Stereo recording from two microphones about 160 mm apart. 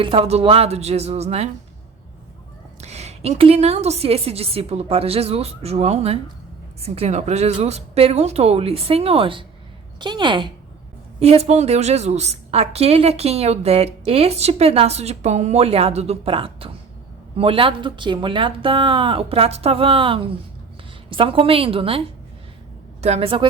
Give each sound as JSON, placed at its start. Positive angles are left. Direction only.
{"t": 0.0, "sound": "a woman's voice", "side_deg": -35}
{"t": 2.8, "sound": "a woman's voice", "side_deg": -45}
{"t": 11.2, "sound": "a woman's voice", "side_deg": -40}